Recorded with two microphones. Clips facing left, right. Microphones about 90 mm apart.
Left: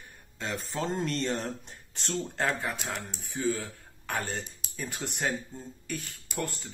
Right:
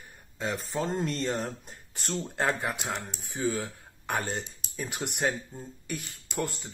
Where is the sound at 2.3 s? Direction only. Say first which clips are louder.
Right 3 dB; 15° right (ahead or behind).